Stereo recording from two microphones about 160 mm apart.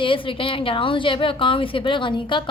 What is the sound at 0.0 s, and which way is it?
A woman's voice, 30° left (ahead or behind).